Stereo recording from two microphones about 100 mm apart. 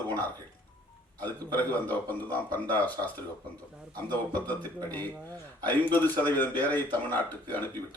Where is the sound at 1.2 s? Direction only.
20° left (ahead or behind).